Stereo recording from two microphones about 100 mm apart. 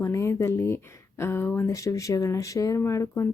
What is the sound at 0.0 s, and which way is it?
Speech, 30° left (ahead or behind).